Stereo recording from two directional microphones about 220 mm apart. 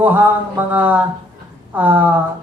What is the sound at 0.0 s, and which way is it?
Speech, 10° right (ahead or behind).